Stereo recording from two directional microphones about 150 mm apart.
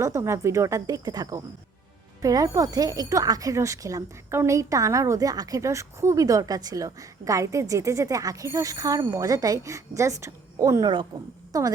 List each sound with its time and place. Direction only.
0.0 s speech: 20° right (ahead or behind)